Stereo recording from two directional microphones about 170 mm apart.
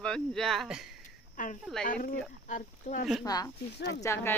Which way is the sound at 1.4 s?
50° left (ahead or behind).